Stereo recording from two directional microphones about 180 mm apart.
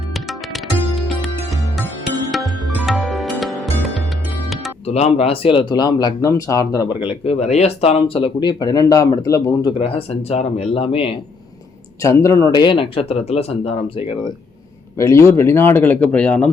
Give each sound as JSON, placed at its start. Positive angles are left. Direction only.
{"t": 0.1, "sound": "music", "side_deg": 0}
{"t": 2.3, "sound": "music", "side_deg": 0}
{"t": 4.9, "sound": "speech", "side_deg": 35}
{"t": 12.0, "sound": "speech", "side_deg": 15}
{"t": 14.9, "sound": "speech", "side_deg": 15}